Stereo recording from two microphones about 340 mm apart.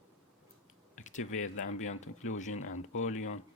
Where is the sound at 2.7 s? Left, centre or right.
Left.